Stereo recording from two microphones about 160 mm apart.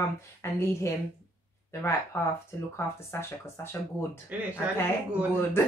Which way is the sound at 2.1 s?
15° left (ahead or behind).